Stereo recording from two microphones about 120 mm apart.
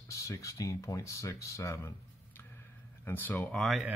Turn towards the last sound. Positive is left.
turn(degrees=0)  # may be behind; listen again after turning